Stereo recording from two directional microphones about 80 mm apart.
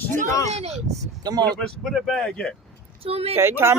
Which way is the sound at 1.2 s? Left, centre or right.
Right.